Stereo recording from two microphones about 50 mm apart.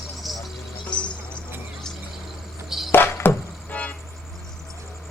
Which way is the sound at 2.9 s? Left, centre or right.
Left.